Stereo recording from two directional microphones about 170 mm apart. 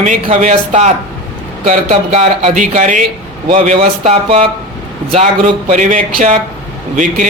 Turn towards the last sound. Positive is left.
turn(degrees=-50)  # may be behind; listen again after turning